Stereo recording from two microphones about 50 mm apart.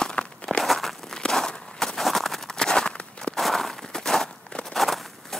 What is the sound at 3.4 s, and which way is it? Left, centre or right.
Walk, centre.